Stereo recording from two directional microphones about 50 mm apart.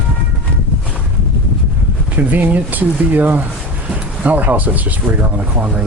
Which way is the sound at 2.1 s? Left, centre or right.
Right.